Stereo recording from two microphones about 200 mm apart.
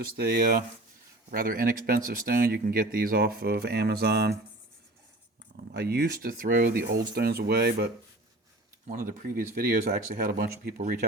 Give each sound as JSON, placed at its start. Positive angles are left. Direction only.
{"t": 0.0, "sound": "speech", "side_deg": -50}
{"t": 5.7, "sound": "speech", "side_deg": -55}
{"t": 8.9, "sound": "speech", "side_deg": -45}